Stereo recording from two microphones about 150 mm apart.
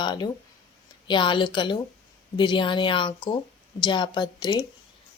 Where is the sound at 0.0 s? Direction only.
30° left (ahead or behind).